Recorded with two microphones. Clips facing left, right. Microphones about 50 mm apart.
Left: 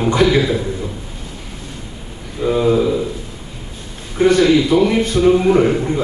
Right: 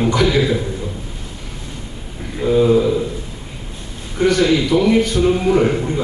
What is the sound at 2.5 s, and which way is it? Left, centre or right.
Speech, centre.